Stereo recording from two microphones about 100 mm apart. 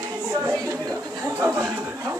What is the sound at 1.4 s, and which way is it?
Speech, 20° right (ahead or behind).